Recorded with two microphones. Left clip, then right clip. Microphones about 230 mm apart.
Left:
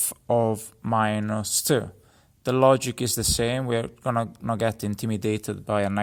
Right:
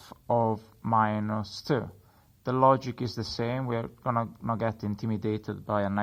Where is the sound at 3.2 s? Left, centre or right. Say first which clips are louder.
Left 7 dB; left.